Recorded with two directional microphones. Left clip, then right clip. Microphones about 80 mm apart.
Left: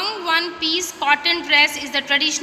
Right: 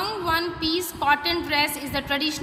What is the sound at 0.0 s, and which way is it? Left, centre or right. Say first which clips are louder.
A woman's voice: left 4 dB; right.